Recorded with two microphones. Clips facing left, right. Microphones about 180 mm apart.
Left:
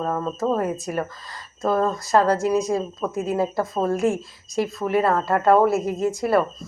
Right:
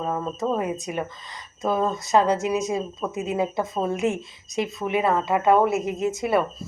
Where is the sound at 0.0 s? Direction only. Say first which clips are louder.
Left 2 dB; 5° right (ahead or behind).